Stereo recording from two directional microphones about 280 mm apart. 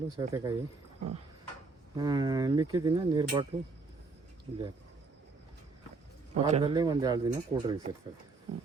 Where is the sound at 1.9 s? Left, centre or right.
Centre.